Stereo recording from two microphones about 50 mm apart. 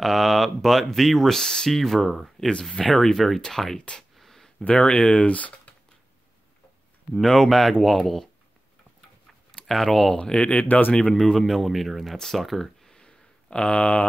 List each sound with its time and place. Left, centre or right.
0.0 s speech: centre
4.2 s a sound: centre
4.6 s speech: left
7.2 s speech: centre
9.7 s speech: centre
10.1 s speech: centre
11.1 s speech: centre
12.9 s a sound: centre